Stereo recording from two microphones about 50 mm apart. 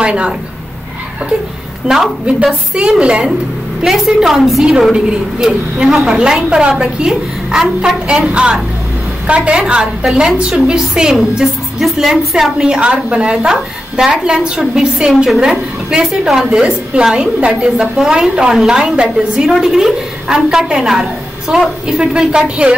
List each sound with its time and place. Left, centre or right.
0.0 s a woman's voice: right
2.2 s a woman's voice: centre
3.8 s a woman's voice: centre
11.1 s a woman's voice: centre